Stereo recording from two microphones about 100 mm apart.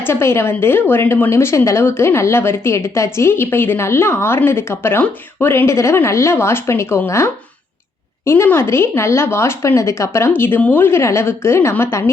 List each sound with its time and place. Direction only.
0.0 s speech: 25° left (ahead or behind)